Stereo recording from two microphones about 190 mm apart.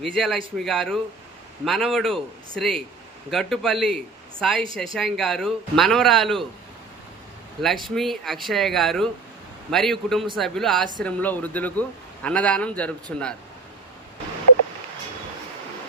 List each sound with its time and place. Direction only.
0.0 s speech: centre (ahead or behind)
7.9 s a man's voice: centre (ahead or behind)